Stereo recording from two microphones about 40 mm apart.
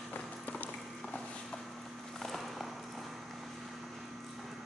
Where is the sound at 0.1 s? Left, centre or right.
Left.